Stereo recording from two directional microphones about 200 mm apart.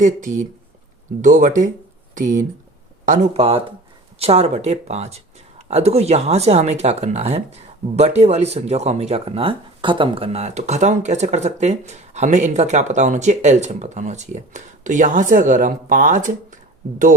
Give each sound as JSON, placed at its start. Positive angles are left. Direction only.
{"t": 0.0, "sound": "speech", "side_deg": -40}